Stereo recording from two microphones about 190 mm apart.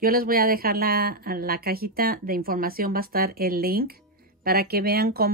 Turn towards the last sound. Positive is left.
turn(degrees=-55)  # may be behind; listen again after turning